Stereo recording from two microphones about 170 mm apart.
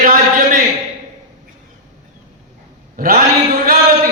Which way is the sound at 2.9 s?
55° right (ahead or behind).